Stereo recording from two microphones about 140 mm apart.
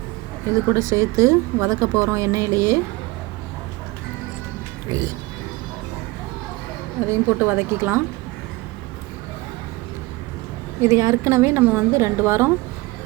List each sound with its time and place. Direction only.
0.7 s speech: 20° right (ahead or behind)
4.9 s speech: 20° right (ahead or behind)
7.1 s a woman's voice: 15° right (ahead or behind)
10.8 s speech: 25° right (ahead or behind)